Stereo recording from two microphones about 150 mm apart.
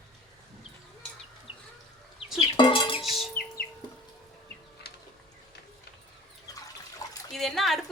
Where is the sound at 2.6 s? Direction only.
35° left (ahead or behind).